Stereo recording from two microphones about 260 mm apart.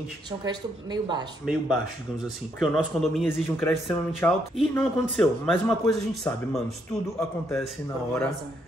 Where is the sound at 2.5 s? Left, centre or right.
Centre.